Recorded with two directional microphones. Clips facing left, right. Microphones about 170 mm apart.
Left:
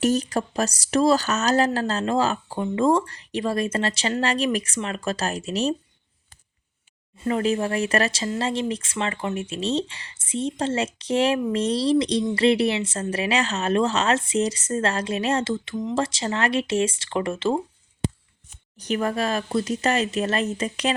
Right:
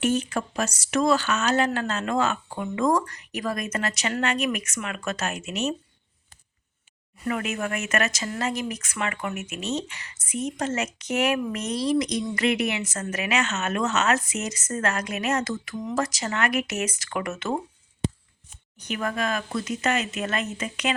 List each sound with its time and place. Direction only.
0.0 s speech: 40° left (ahead or behind)
7.2 s speech: 30° left (ahead or behind)
18.8 s speech: 35° left (ahead or behind)